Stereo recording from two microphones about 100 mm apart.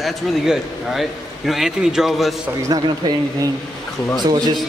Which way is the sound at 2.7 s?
40° right (ahead or behind).